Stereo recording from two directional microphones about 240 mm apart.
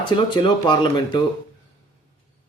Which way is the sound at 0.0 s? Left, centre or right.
Centre.